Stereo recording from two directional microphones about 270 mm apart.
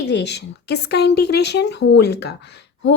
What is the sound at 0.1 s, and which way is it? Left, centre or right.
A woman's voice, left.